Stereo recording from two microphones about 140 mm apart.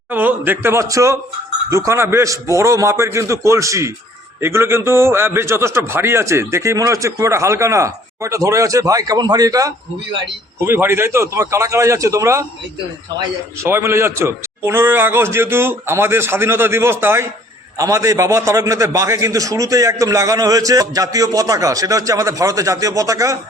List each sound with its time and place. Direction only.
0.1 s a man's voice: 15° right (ahead or behind)
13.6 s a man's voice: 20° right (ahead or behind)